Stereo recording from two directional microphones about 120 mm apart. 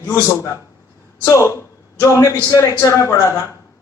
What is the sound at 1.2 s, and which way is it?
A man's voice, 25° left (ahead or behind).